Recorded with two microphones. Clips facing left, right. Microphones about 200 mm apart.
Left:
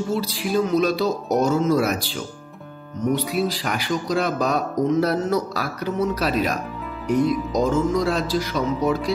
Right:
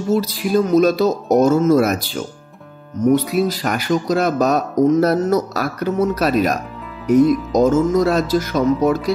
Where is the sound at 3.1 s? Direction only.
45° right (ahead or behind).